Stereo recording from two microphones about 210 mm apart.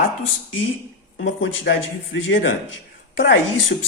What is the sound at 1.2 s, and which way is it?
Speech, 60° left (ahead or behind).